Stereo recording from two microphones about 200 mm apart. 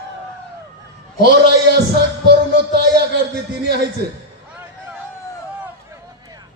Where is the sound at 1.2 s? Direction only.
55° right (ahead or behind).